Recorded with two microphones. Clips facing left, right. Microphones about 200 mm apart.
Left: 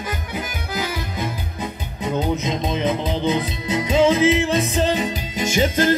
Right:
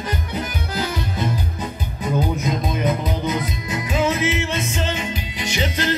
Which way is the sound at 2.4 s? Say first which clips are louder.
Even; 25° left (ahead or behind).